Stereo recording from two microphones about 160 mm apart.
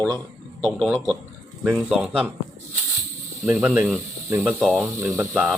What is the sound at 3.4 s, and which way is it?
Speech, 15° right (ahead or behind).